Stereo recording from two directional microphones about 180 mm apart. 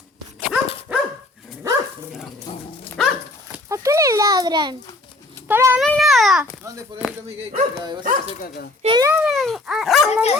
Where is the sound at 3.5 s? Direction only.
15° right (ahead or behind).